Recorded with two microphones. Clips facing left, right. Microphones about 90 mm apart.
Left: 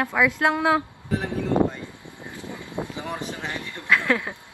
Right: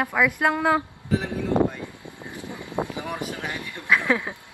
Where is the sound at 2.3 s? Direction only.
15° right (ahead or behind).